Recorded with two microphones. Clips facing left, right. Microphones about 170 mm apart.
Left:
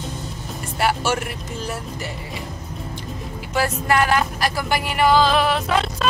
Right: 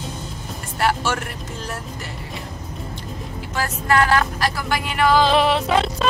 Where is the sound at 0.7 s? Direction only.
5° left (ahead or behind).